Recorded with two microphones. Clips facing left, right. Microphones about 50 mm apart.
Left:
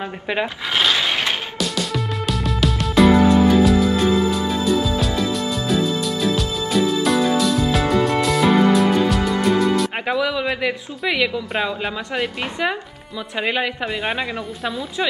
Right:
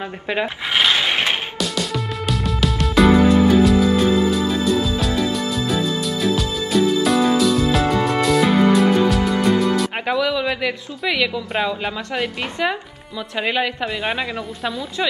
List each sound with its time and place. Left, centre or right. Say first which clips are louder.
0.7 s a sound: right 1 dB; right
1.6 s music: even; centre
13.4 s a woman's voice: right 1 dB; centre